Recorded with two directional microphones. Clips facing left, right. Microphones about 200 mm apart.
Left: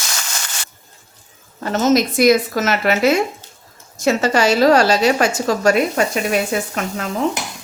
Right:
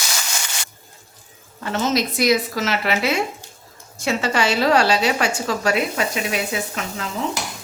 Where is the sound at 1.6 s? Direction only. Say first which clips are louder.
Left 6 dB; 40° left (ahead or behind).